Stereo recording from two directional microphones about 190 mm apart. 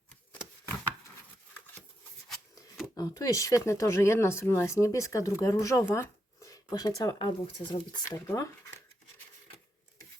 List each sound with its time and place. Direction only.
2.9 s speech: 20° left (ahead or behind)